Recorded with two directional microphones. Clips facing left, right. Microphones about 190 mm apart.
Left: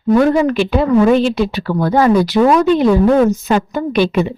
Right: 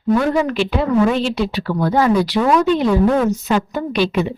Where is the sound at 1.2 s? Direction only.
50° left (ahead or behind).